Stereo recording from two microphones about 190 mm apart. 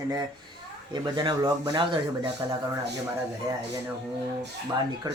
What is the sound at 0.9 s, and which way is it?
Speech, 25° right (ahead or behind).